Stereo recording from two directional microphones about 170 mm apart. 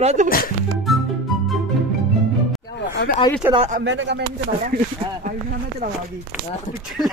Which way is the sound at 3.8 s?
90° right.